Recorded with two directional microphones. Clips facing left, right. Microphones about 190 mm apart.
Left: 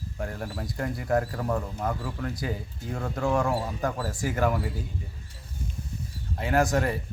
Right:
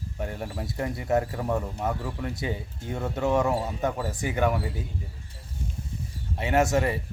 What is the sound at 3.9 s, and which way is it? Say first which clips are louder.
Speech: right 1 dB; centre (ahead or behind).